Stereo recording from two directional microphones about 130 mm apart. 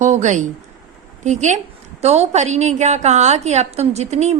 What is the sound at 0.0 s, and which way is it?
A woman's voice, 70° right (ahead or behind).